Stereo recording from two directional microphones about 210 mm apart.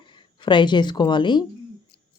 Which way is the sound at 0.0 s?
20° left (ahead or behind).